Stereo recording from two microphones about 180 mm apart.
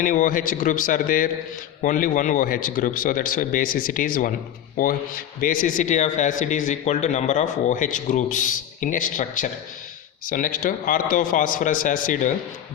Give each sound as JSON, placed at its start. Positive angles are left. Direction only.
{"t": 0.0, "sound": "a man's voice", "side_deg": 50}